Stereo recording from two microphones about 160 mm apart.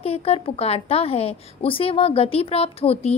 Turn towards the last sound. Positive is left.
turn(degrees=40)  # may be behind; listen again after turning